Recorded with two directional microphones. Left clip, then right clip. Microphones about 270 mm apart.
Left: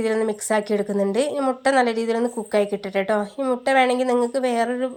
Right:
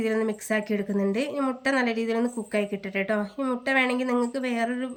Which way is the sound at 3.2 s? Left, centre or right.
Centre.